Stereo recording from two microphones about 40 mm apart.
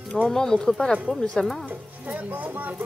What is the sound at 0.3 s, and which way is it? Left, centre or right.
Speech, centre.